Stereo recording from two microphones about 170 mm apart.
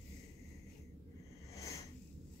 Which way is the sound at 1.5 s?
20° left (ahead or behind).